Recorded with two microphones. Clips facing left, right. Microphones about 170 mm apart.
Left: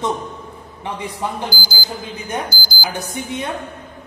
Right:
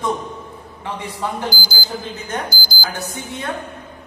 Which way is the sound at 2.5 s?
55° right (ahead or behind).